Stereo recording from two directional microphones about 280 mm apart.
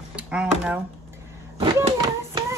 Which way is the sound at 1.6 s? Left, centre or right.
Centre.